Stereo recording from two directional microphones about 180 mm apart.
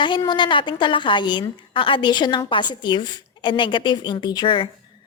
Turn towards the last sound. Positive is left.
turn(degrees=30)  # may be behind; listen again after turning